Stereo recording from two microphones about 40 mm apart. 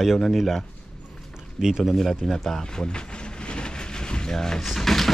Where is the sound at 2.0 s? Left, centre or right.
Centre.